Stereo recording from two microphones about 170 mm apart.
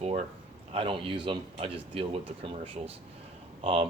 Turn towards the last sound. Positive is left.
turn(degrees=-35)  # may be behind; listen again after turning